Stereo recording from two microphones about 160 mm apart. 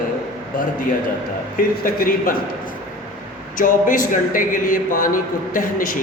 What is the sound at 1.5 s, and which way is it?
Speech, 60° left (ahead or behind).